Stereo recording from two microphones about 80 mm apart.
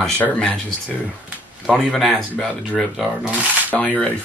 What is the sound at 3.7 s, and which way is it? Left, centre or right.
Speech, centre.